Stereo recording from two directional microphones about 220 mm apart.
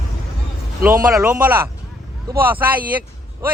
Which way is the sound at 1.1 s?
5° right (ahead or behind).